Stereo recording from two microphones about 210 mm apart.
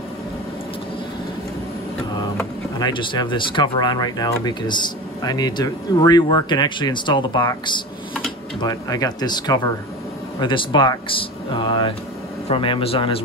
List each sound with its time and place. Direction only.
2.8 s speech: 25° left (ahead or behind)